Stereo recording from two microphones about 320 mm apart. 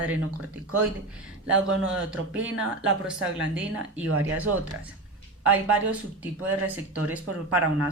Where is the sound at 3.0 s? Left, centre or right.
Centre.